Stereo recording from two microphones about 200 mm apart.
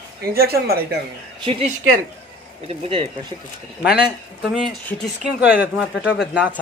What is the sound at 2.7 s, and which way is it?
Speech, 30° right (ahead or behind).